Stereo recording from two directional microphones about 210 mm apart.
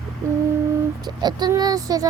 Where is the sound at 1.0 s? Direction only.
20° right (ahead or behind).